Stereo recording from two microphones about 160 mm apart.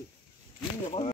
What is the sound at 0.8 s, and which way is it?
Speech, 35° left (ahead or behind).